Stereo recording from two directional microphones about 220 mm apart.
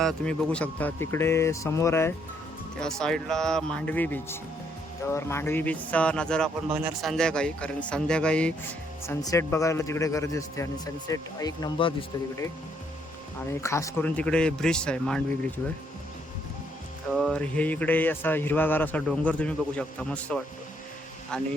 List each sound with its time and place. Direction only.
0.0 s a man's voice: 5° left (ahead or behind); by 11.9 s 20° left (ahead or behind)
13.5 s a man's voice: 15° left (ahead or behind)
17.1 s a man's voice: centre (ahead or behind)